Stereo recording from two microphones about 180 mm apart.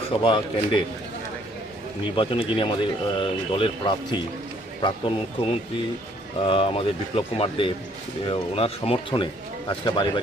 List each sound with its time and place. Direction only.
0.2 s speech: 30° left (ahead or behind)
2.1 s speech: 30° left (ahead or behind)
6.4 s speech: 30° left (ahead or behind)